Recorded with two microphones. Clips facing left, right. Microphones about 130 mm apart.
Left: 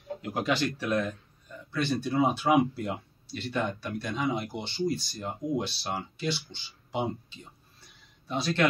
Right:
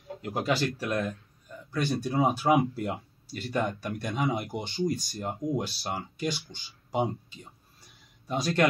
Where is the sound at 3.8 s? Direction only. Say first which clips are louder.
Right 1 dB; 50° right (ahead or behind).